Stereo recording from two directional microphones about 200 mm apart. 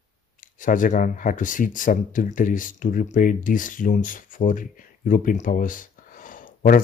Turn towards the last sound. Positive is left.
turn(degrees=40)  # may be behind; listen again after turning